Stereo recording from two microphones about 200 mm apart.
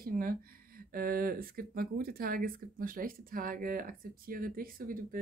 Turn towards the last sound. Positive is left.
turn(degrees=-45)  # may be behind; listen again after turning